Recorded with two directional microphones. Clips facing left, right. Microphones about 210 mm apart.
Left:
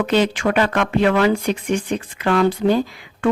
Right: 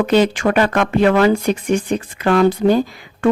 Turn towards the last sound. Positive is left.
turn(degrees=-45)  # may be behind; listen again after turning